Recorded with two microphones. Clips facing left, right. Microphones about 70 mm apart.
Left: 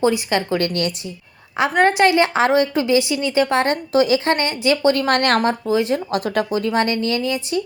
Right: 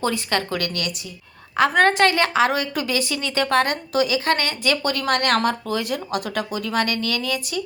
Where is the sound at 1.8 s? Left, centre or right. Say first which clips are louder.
Left 5 dB; centre.